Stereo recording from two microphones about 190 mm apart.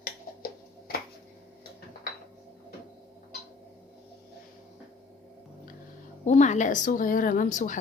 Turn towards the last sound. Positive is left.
turn(degrees=40)  # may be behind; listen again after turning